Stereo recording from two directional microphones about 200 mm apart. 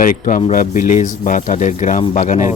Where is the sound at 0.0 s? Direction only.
40° left (ahead or behind).